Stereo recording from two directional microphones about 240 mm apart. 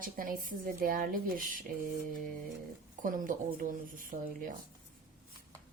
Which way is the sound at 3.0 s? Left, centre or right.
Right.